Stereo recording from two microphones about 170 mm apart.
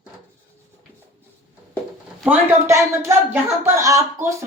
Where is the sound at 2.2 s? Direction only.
15° right (ahead or behind).